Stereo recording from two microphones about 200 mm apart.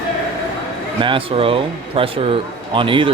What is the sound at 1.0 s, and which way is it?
Speech, 25° right (ahead or behind).